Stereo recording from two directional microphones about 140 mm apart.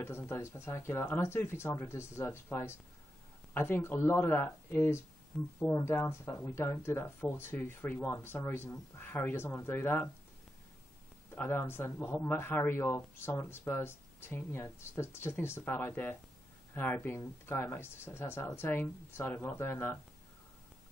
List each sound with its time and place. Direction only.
0.0 s speech: 20° left (ahead or behind)
11.3 s speech: 15° left (ahead or behind)